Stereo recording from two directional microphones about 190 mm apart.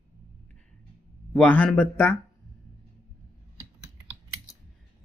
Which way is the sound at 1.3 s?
5° left (ahead or behind).